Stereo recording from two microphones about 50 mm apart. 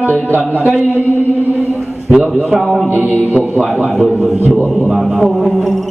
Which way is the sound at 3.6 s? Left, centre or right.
Centre.